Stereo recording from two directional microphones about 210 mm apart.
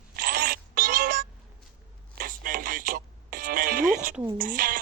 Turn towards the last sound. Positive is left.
turn(degrees=-45)  # may be behind; listen again after turning